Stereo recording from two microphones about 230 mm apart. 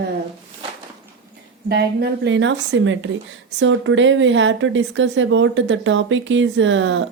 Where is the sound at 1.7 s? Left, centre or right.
Right.